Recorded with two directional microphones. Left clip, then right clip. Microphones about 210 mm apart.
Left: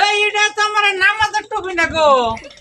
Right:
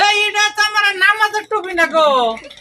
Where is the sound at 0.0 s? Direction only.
45° right (ahead or behind).